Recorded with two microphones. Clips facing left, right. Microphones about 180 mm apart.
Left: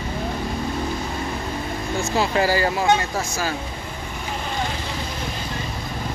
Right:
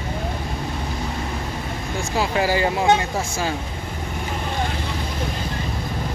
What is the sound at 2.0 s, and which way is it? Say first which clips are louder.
Speech: left 1 dB; 10° right (ahead or behind).